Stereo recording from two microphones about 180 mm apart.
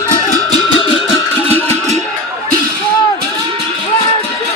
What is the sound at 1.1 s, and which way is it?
Music, 10° left (ahead or behind).